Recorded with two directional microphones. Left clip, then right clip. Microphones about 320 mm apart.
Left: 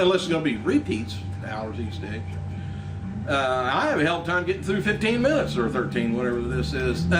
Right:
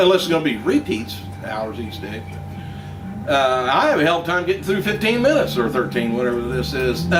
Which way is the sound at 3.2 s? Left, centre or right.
Centre.